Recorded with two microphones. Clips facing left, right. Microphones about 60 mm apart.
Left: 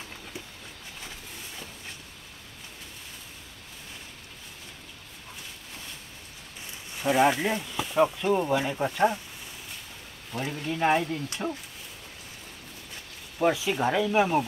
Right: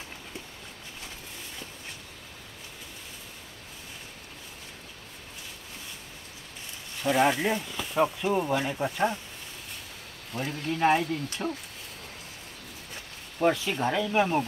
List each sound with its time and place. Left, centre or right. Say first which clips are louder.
7.0 s speech: left 1 dB; centre
10.5 s speech: right 2 dB; centre
10.8 s speech: right 1 dB; centre
13.4 s speech: left 1 dB; centre